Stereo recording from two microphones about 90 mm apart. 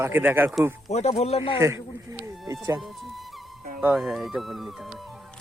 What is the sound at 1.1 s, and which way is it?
Speech, 90° left.